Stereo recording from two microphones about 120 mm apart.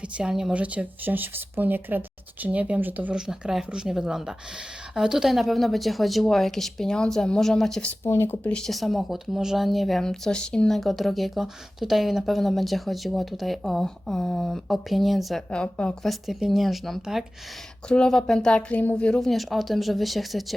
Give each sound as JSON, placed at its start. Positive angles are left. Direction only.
{"t": 0.1, "sound": "speech", "side_deg": -5}
{"t": 8.0, "sound": "speech", "side_deg": 20}
{"t": 8.5, "sound": "speech", "side_deg": 0}